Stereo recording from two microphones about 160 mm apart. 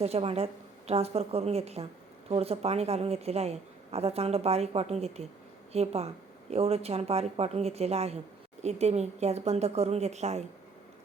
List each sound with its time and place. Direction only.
0.0 s a woman's voice: 40° right (ahead or behind)